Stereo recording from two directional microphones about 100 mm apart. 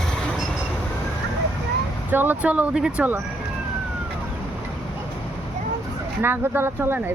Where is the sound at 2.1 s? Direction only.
20° right (ahead or behind).